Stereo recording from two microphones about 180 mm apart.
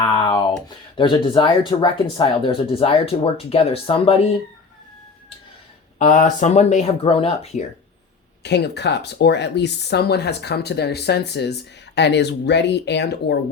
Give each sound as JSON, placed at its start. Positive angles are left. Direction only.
{"t": 0.0, "sound": "a sound", "side_deg": 25}
{"t": 0.9, "sound": "speech", "side_deg": 25}
{"t": 6.0, "sound": "speech", "side_deg": 45}
{"t": 8.4, "sound": "speech", "side_deg": 70}